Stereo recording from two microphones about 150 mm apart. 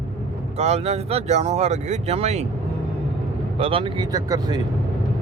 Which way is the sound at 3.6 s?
35° right (ahead or behind).